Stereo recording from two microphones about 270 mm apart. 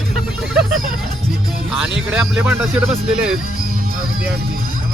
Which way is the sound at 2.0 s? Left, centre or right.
Centre.